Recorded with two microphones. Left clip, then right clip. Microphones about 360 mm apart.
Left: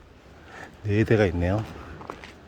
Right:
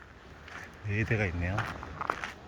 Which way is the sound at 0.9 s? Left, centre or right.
Centre.